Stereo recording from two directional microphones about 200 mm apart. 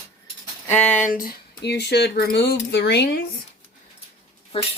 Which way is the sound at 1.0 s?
40° left (ahead or behind).